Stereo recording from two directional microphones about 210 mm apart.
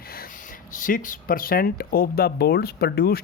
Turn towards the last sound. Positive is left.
turn(degrees=50)  # may be behind; listen again after turning